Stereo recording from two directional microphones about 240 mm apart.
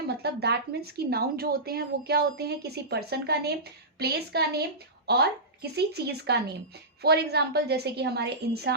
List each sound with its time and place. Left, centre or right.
0.1 s speech: right